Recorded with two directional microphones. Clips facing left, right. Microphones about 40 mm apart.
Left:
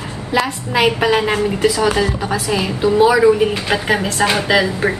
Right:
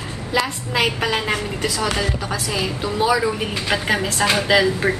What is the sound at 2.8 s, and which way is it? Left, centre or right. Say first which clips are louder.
A woman's voice: left 8 dB; centre.